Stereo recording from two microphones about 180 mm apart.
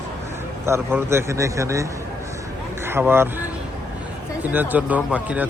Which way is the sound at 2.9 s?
15° right (ahead or behind).